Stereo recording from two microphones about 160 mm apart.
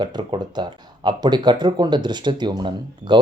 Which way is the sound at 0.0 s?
25° right (ahead or behind).